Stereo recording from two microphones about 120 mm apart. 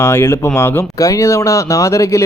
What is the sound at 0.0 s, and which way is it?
Speech, 20° left (ahead or behind).